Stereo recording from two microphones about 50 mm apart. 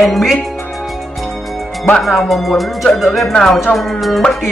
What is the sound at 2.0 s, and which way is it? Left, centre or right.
Speech, centre.